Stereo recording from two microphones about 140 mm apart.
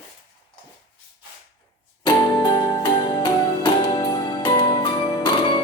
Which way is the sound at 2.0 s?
30° left (ahead or behind).